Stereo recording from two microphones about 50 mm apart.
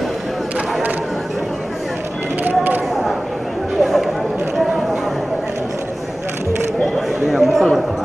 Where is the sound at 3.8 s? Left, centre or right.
Centre.